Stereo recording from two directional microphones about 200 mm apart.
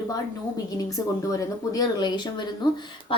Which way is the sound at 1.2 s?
20° left (ahead or behind).